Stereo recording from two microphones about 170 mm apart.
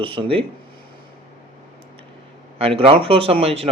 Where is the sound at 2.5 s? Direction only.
35° right (ahead or behind).